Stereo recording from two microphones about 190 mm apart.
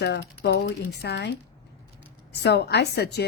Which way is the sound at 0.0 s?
65° left (ahead or behind).